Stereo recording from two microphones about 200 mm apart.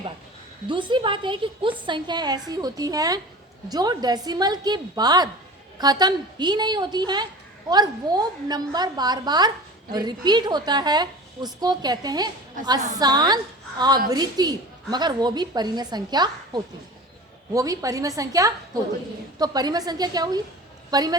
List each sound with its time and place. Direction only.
0.7 s a woman's voice: 25° right (ahead or behind)